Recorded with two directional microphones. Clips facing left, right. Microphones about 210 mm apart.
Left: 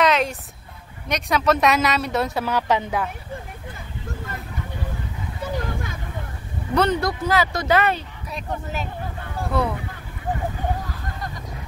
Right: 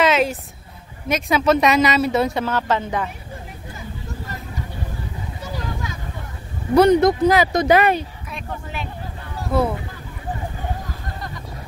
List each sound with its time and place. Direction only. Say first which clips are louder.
0.0 s a sound: right 2 dB; 5° right (ahead or behind)
1.0 s a woman's voice: right 3 dB; 5° right (ahead or behind)
2.4 s speech: even; 15° left (ahead or behind)
5.4 s a sound: left 3 dB; 55° left (ahead or behind)
6.7 s speech: right 8 dB; 15° right (ahead or behind)
8.3 s speech: left 2 dB; 40° left (ahead or behind)